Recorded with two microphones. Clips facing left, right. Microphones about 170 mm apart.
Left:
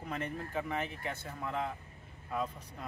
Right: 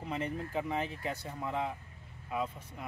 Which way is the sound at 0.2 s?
25° right (ahead or behind).